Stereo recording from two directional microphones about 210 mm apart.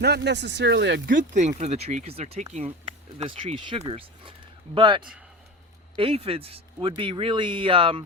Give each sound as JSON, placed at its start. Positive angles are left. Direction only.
{"t": 0.0, "sound": "speech", "side_deg": -50}